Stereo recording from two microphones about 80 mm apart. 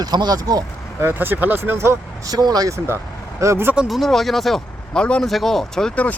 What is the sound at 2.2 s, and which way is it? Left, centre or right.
Speech, right.